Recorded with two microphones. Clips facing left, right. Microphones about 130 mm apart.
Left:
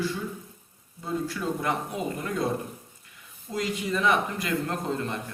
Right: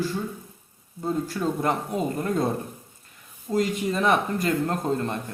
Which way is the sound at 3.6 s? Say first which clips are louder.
Right 3 dB; 30° right (ahead or behind).